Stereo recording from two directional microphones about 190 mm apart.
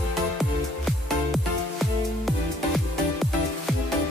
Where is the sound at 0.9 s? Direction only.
Centre (ahead or behind).